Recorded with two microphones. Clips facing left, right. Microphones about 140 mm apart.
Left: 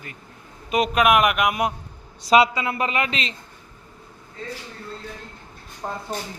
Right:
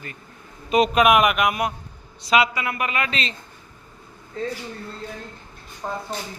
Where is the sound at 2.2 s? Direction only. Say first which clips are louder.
Left 3 dB; 35° left (ahead or behind).